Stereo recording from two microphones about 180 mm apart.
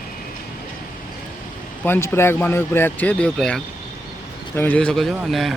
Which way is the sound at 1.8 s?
10° left (ahead or behind).